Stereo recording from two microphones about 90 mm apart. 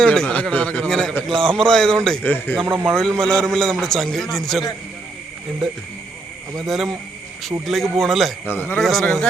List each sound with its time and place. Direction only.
0.0 s a man's voice: 10° left (ahead or behind)
0.9 s a man's voice: 5° left (ahead or behind)
2.2 s speech: 20° left (ahead or behind)
2.8 s a man's voice: 5° left (ahead or behind)
6.6 s a man's voice: centre (ahead or behind)
8.4 s speech: 25° left (ahead or behind)
8.8 s a man's voice: centre (ahead or behind)